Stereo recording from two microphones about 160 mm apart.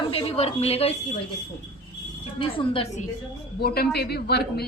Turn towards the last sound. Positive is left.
turn(degrees=85)